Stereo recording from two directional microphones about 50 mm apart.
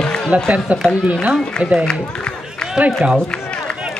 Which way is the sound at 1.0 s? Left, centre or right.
Right.